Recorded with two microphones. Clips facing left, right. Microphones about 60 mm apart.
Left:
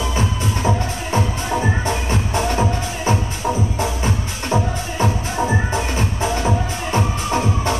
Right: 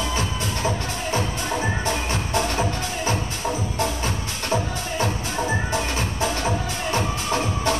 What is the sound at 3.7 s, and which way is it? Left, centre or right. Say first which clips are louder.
Music: left 3 dB; centre.